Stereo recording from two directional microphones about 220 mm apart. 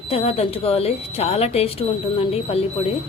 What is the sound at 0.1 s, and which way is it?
Speech, 25° left (ahead or behind).